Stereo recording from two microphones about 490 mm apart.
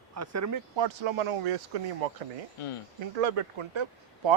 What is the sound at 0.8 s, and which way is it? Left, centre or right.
Speech, right.